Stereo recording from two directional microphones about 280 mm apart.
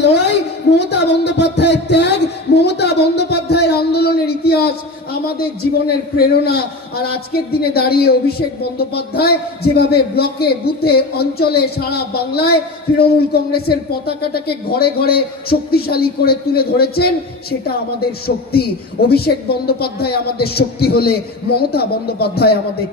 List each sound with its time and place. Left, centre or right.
0.7 s a woman's voice: left